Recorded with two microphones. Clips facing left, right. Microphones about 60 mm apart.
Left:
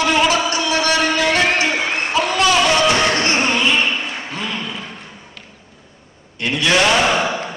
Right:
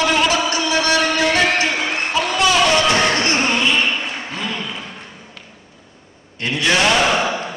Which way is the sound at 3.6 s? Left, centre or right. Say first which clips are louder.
Left 1 dB; left.